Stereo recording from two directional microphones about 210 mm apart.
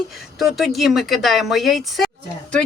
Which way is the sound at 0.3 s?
Centre (ahead or behind).